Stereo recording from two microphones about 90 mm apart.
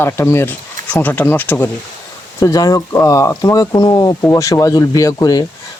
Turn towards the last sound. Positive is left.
turn(degrees=45)  # may be behind; listen again after turning